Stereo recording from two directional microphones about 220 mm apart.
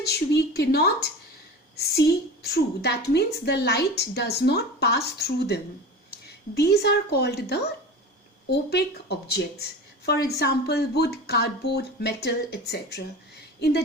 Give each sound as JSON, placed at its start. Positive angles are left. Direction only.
{"t": 0.1, "sound": "a woman's voice", "side_deg": 50}